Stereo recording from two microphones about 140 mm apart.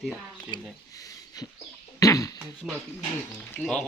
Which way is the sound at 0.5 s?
25° left (ahead or behind).